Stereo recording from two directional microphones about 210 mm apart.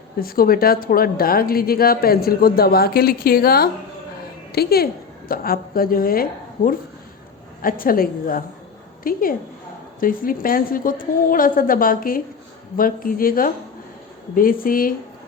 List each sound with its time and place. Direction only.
0.2 s a woman's voice: 45° left (ahead or behind)